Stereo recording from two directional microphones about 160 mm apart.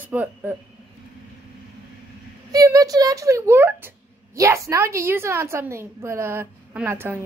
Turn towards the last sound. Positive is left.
turn(degrees=-15)  # may be behind; listen again after turning